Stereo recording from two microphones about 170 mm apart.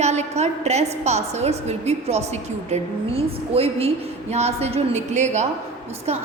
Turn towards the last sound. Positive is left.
turn(degrees=-40)  # may be behind; listen again after turning